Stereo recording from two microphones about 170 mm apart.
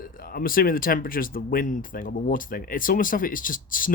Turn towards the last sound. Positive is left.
turn(degrees=55)  # may be behind; listen again after turning